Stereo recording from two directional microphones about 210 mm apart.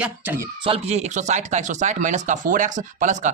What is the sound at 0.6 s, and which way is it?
Speech, 30° right (ahead or behind).